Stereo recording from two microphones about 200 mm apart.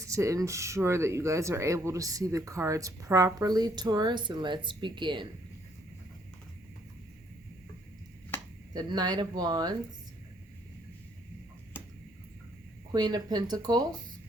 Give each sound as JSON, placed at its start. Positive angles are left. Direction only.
{"t": 0.0, "sound": "speech", "side_deg": -15}
{"t": 8.7, "sound": "speech", "side_deg": -20}
{"t": 12.9, "sound": "speech", "side_deg": -20}